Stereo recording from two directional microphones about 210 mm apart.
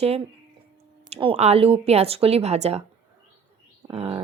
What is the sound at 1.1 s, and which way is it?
Speech, 25° right (ahead or behind).